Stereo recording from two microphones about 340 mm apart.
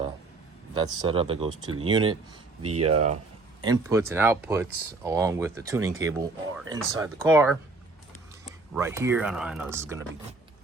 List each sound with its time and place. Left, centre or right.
1.0 s speech: centre
2.6 s speech: right
3.6 s speech: centre
8.7 s speech: centre